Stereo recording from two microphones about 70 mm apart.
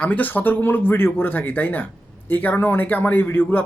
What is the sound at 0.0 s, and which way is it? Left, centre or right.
Speech, left.